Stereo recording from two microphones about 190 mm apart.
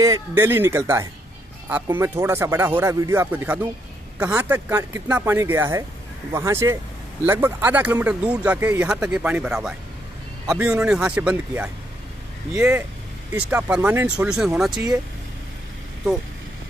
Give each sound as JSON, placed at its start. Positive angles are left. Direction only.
{"t": 0.0, "sound": "speech", "side_deg": -15}
{"t": 14.7, "sound": "speech", "side_deg": -20}